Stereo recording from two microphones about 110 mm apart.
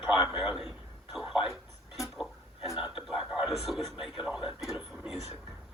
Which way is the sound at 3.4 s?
Centre (ahead or behind).